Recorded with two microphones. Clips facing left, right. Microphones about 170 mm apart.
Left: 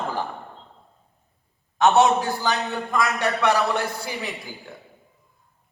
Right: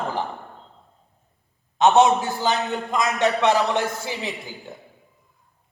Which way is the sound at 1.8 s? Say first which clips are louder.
Right 1 dB; 20° right (ahead or behind).